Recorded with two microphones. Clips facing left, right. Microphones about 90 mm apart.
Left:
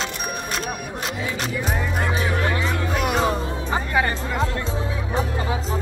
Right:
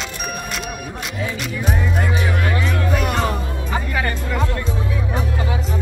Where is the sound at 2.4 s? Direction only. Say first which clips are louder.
Right 1 dB; 25° left (ahead or behind).